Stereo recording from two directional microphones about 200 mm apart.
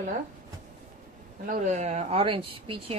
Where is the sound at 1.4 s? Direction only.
40° right (ahead or behind).